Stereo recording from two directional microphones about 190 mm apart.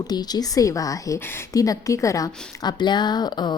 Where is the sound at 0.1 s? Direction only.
20° left (ahead or behind).